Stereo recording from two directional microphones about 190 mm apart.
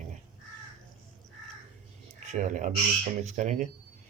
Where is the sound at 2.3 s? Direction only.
40° right (ahead or behind).